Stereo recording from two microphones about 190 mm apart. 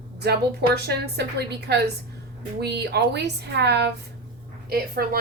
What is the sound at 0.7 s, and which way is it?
A woman's voice, 60° right (ahead or behind).